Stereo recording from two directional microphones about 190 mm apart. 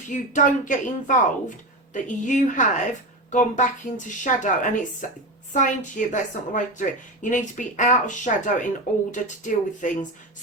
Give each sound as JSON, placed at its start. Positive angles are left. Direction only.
{"t": 0.1, "sound": "a woman's voice", "side_deg": 40}